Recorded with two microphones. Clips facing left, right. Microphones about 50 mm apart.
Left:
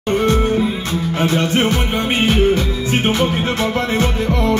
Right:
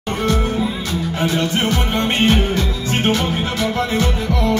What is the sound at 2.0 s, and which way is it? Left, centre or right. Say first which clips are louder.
Music: right 2 dB; centre.